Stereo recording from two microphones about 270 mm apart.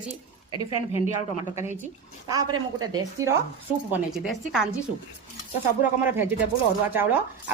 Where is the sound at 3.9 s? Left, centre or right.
Centre.